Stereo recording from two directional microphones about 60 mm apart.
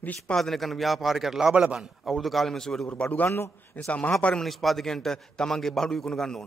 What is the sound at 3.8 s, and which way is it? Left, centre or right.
Speech, left.